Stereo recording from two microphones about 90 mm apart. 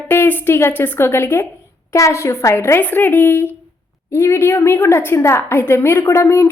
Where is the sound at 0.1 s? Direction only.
25° left (ahead or behind).